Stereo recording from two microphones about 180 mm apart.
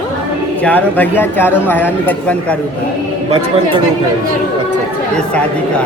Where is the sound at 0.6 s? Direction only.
10° left (ahead or behind).